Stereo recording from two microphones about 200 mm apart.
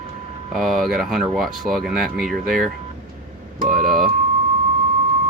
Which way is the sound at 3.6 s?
45° right (ahead or behind).